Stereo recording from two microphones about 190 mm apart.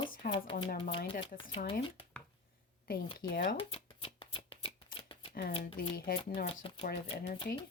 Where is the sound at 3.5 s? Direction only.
30° left (ahead or behind).